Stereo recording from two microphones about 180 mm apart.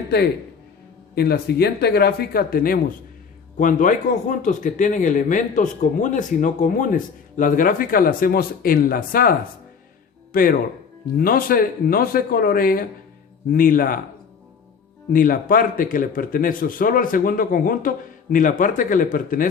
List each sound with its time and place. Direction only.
1.1 s speech: 60° left (ahead or behind)
10.3 s speech: 55° left (ahead or behind)
15.1 s speech: 50° left (ahead or behind)